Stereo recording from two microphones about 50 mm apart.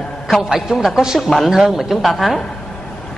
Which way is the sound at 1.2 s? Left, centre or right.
Centre.